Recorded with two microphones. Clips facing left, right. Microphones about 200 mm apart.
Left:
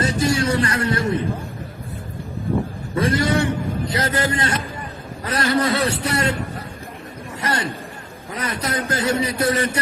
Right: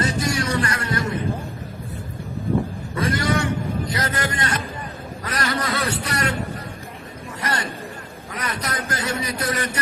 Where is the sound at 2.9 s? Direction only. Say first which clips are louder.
Left 3 dB; 30° left (ahead or behind).